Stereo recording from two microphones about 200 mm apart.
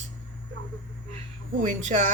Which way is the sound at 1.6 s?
35° right (ahead or behind).